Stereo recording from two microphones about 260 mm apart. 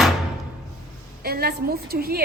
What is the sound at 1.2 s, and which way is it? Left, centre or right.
Speech, right.